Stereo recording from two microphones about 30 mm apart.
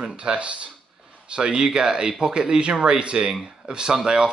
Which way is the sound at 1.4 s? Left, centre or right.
Right.